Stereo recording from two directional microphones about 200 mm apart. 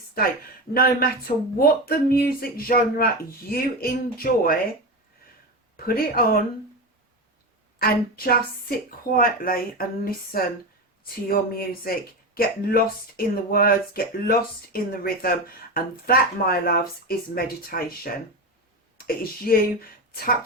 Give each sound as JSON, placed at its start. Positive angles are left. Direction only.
{"t": 0.7, "sound": "speech", "side_deg": 50}
{"t": 5.7, "sound": "speech", "side_deg": 45}
{"t": 7.8, "sound": "speech", "side_deg": 50}